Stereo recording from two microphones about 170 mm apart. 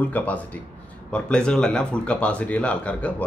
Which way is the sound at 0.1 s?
10° left (ahead or behind).